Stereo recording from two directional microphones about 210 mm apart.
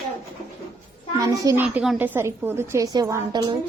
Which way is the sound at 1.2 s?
15° right (ahead or behind).